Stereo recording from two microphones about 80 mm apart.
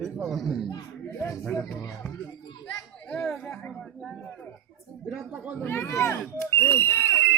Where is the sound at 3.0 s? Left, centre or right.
Centre.